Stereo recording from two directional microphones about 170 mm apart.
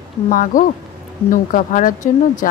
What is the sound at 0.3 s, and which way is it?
A woman's voice, 55° left (ahead or behind).